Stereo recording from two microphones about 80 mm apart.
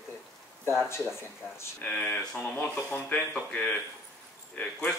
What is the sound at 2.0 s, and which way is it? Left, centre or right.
Speech, centre.